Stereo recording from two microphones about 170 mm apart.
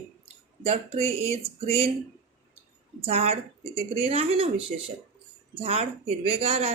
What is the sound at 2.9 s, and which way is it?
Speech, 35° right (ahead or behind).